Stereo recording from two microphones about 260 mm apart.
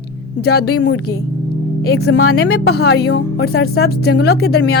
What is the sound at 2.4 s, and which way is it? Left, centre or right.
Speech, left.